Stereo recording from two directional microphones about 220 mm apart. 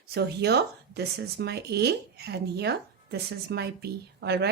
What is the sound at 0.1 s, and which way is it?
A woman's voice, 50° right (ahead or behind).